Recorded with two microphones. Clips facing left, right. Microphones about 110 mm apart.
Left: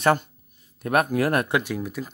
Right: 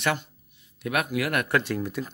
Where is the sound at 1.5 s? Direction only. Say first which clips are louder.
Even; 10° left (ahead or behind).